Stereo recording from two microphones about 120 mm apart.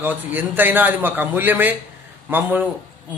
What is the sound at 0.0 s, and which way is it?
A man's voice, 15° right (ahead or behind).